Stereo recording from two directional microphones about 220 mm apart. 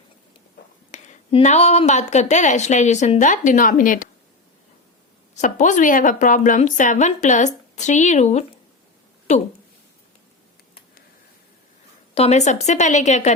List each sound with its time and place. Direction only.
0.9 s speech: 30° left (ahead or behind)
5.3 s speech: 35° left (ahead or behind)
12.1 s speech: 30° left (ahead or behind)